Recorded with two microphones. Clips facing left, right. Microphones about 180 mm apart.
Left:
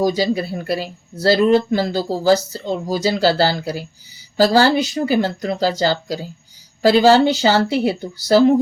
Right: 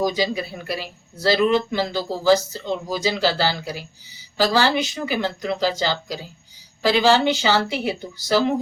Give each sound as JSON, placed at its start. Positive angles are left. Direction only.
{"t": 0.0, "sound": "speech", "side_deg": 40}